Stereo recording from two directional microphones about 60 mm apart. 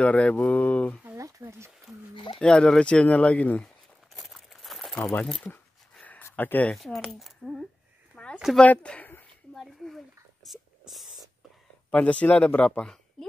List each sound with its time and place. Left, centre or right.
0.0 s speech: left
1.4 s speech: right
2.4 s speech: centre
3.6 s a sound: centre
6.3 s speech: left
6.8 s speech: centre
8.1 s a sound: centre
8.5 s speech: centre
9.6 s a sound: centre
11.9 s speech: left